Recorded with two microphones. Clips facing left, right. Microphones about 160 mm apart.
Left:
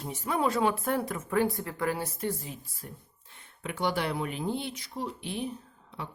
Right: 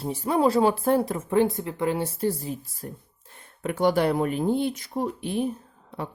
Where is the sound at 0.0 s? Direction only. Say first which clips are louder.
Right 7 dB; 30° right (ahead or behind).